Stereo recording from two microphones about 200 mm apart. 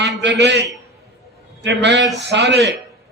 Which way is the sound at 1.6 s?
60° right (ahead or behind).